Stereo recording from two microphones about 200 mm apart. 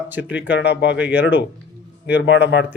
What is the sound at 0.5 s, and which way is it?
Speech, 60° left (ahead or behind).